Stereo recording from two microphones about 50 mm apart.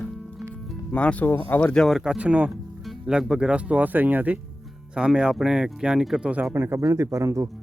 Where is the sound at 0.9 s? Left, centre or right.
Left.